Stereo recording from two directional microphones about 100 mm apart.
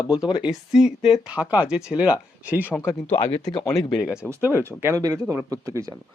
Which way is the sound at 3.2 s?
90° left.